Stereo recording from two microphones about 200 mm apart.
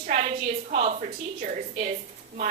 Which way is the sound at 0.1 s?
35° right (ahead or behind).